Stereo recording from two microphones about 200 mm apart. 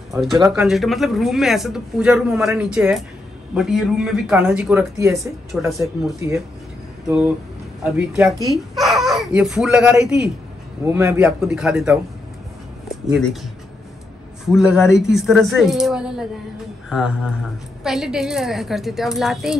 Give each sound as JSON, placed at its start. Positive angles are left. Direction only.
{"t": 0.1, "sound": "speech", "side_deg": 0}
{"t": 4.9, "sound": "speech", "side_deg": -15}
{"t": 5.7, "sound": "speech", "side_deg": 0}
{"t": 7.8, "sound": "speech", "side_deg": -5}
{"t": 14.4, "sound": "speech", "side_deg": 0}